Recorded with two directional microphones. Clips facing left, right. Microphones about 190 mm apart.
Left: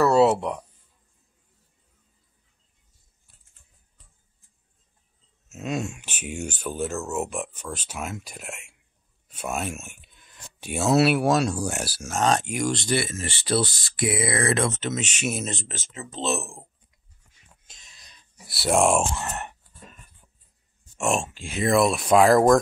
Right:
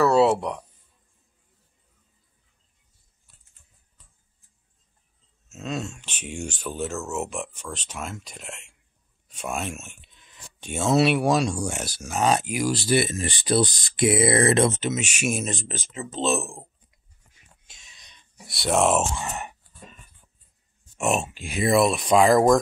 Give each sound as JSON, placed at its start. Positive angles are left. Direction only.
{"t": 0.0, "sound": "a sound", "side_deg": 0}
{"t": 5.5, "sound": "speech", "side_deg": 10}
{"t": 12.1, "sound": "speech", "side_deg": -10}
{"t": 12.9, "sound": "speech", "side_deg": -15}
{"t": 14.8, "sound": "speech", "side_deg": -10}
{"t": 17.6, "sound": "sigh", "side_deg": 0}
{"t": 21.0, "sound": "speech", "side_deg": -5}